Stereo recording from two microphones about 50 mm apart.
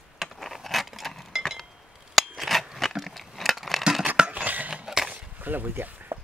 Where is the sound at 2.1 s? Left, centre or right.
Centre.